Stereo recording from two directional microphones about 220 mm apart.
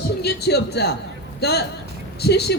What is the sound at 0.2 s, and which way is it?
Speech, 50° left (ahead or behind).